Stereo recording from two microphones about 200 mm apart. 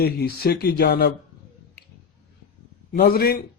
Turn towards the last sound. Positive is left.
turn(degrees=50)  # may be behind; listen again after turning